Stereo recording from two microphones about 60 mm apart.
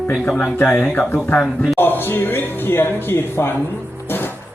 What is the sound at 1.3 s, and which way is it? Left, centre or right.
Speech, centre.